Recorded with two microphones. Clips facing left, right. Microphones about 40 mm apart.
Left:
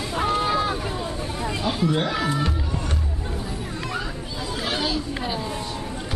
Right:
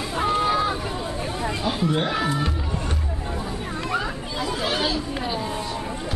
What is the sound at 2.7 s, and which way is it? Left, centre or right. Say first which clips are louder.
Music: even; right.